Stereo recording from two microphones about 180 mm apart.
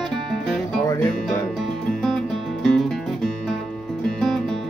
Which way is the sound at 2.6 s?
5° left (ahead or behind).